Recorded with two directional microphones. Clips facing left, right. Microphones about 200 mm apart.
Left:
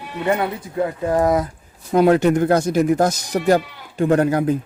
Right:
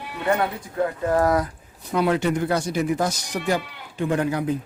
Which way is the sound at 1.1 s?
15° left (ahead or behind).